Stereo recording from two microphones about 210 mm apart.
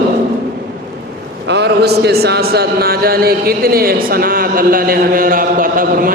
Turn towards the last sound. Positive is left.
turn(degrees=-40)  # may be behind; listen again after turning